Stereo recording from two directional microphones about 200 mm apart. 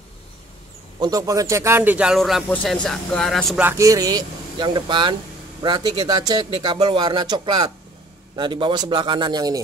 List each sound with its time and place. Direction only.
0.9 s a man's voice: 20° right (ahead or behind); by 3.6 s centre (ahead or behind)
3.6 s speech: 15° right (ahead or behind)